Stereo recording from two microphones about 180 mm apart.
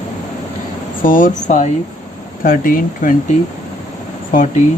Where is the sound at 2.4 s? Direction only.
50° left (ahead or behind).